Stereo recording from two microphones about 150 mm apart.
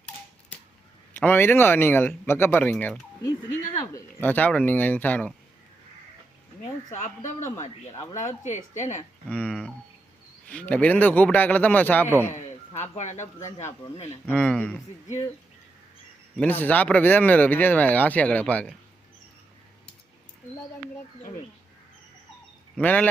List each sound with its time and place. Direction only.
1.1 s speech: 15° left (ahead or behind)
4.2 s speech: 10° left (ahead or behind)
6.9 s speech: 55° left (ahead or behind)
8.4 s a woman's voice: 55° left (ahead or behind)
9.3 s speech: 10° left (ahead or behind)
13.1 s speech: 15° left (ahead or behind)
16.4 s speech: 10° left (ahead or behind)
22.8 s speech: 10° left (ahead or behind)